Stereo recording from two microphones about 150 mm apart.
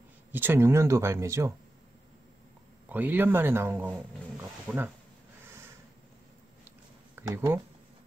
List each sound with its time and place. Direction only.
0.3 s speech: 15° right (ahead or behind)
2.9 s speech: 10° right (ahead or behind)
5.4 s snort: 15° right (ahead or behind)
7.2 s speech: 15° right (ahead or behind)